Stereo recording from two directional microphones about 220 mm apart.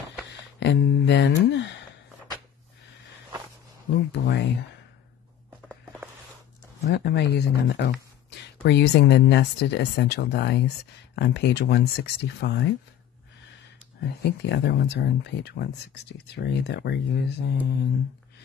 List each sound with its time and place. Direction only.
0.6 s a sound: 50° left (ahead or behind)
4.1 s speech: 50° left (ahead or behind)
6.8 s speech: 50° left (ahead or behind)
14.0 s speech: 50° left (ahead or behind)